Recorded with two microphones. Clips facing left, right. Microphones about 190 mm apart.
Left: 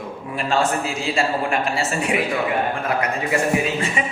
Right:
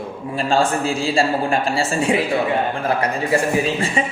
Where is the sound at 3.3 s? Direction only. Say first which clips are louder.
Right 2 dB; 30° right (ahead or behind).